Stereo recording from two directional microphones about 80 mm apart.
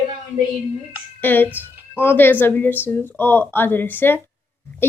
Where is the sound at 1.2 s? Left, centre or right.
Left.